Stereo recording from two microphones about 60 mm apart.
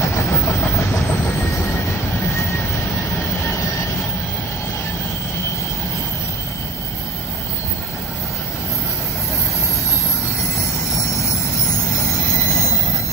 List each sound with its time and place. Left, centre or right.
0.0 s train: left